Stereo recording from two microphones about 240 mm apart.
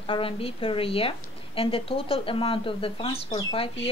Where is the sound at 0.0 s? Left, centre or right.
Left.